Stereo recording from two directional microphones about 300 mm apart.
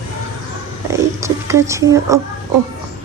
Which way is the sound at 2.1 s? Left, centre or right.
Centre.